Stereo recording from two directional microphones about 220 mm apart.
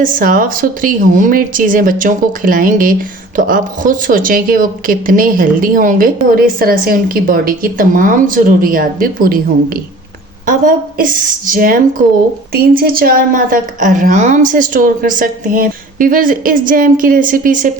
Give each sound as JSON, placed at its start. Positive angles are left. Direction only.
{"t": 0.0, "sound": "a woman's voice", "side_deg": -40}